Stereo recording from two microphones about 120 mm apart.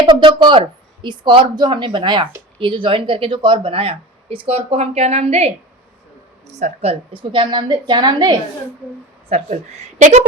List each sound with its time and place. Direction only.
0.0 s a woman's voice: 40° right (ahead or behind); by 5.5 s 60° right (ahead or behind)
6.5 s speech: 70° right (ahead or behind)
7.1 s a woman's voice: 40° right (ahead or behind)
9.3 s speech: 70° right (ahead or behind)